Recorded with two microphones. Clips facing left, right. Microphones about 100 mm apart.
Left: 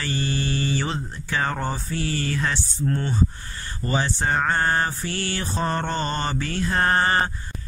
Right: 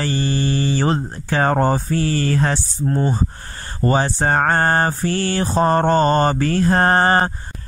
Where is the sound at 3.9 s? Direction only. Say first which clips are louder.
Right 6 dB; 45° right (ahead or behind).